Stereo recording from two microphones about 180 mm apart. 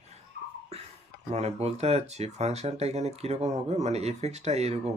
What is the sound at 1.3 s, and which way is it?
Speech, 35° right (ahead or behind).